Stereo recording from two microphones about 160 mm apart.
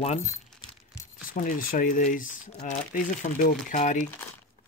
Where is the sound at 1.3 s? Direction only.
60° left (ahead or behind).